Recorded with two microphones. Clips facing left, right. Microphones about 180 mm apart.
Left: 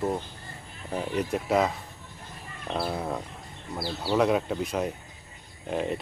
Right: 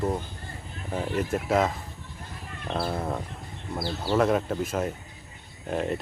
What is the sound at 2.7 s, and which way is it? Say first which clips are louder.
Speech: right 1 dB; centre (ahead or behind).